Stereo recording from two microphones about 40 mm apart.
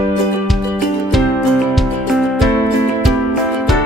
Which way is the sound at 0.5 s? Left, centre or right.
Centre.